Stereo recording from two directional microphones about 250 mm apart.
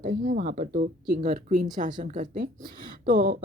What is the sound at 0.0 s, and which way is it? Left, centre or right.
Speech, right.